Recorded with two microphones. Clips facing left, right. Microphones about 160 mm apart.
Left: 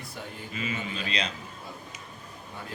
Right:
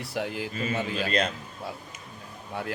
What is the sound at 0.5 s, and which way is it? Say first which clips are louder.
Speech: right 2 dB; 40° right (ahead or behind).